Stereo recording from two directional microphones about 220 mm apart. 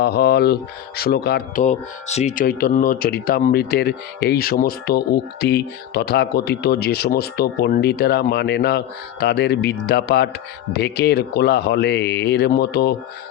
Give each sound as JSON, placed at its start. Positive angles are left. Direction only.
{"t": 0.0, "sound": "speech", "side_deg": 45}
{"t": 1.6, "sound": "speech", "side_deg": 30}